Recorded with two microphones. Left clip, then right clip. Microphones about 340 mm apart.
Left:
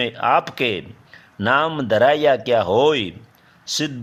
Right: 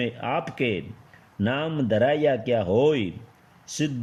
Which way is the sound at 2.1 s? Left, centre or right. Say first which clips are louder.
Left 6 dB; centre.